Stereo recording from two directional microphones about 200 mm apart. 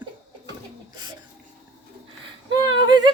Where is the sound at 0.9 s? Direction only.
20° right (ahead or behind).